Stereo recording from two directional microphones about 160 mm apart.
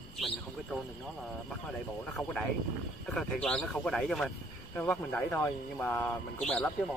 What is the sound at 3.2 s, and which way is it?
Speech, 5° left (ahead or behind).